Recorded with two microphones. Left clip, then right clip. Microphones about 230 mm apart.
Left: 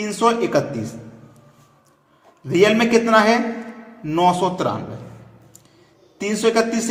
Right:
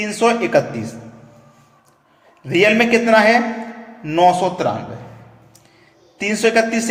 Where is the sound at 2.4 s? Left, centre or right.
Centre.